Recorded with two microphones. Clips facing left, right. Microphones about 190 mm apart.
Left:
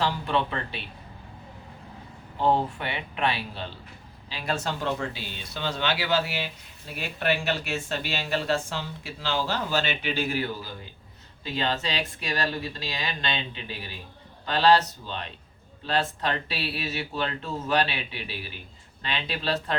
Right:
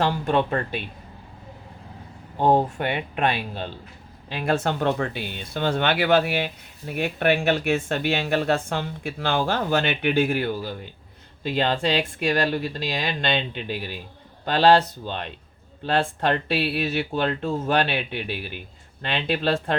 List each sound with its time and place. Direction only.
0.0 s speech: 50° right (ahead or behind)
2.4 s speech: 45° right (ahead or behind)